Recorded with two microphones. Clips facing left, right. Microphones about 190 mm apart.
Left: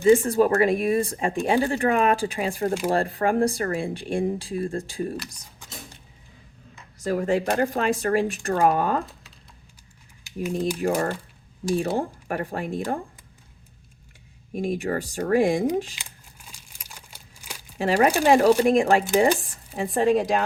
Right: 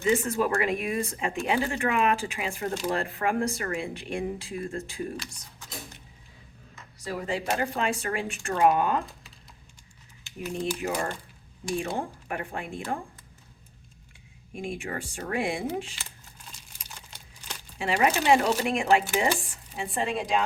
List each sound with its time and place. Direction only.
0.0 s speech: 30° left (ahead or behind)
7.0 s speech: 45° left (ahead or behind)
10.8 s speech: 40° left (ahead or behind)
14.5 s speech: 40° left (ahead or behind)
16.0 s crumpling: 10° left (ahead or behind)
17.7 s speech: 45° left (ahead or behind)